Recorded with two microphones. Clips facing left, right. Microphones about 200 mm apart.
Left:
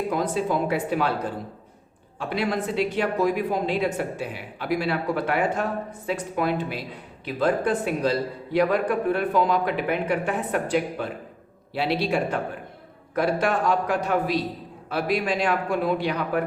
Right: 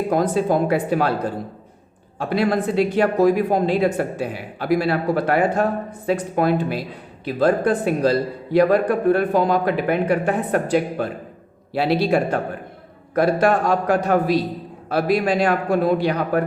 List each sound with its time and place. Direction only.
0.1 s speech: 45° right (ahead or behind)
2.1 s a man's voice: 40° right (ahead or behind)